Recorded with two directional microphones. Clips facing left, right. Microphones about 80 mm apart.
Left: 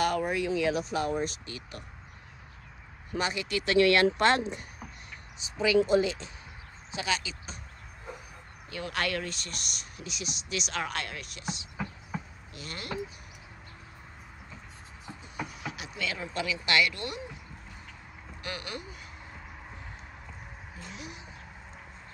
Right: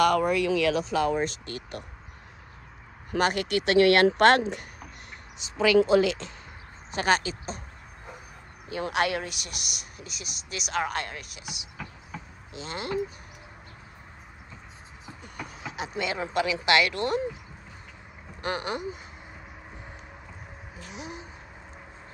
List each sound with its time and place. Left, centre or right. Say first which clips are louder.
0.0 s speech: right 6 dB; right
3.1 s speech: right 6 dB; right
5.6 s speech: right 4 dB; right
6.9 s speech: right 8 dB; right
8.6 s speech: right 6 dB; right; by 11.6 s centre
12.1 s basketball bounce: left 3 dB; centre
12.5 s speech: right 7 dB; right
15.6 s speech: right 8 dB; right
18.4 s speech: right 9 dB; right
20.7 s speech: right 3 dB; centre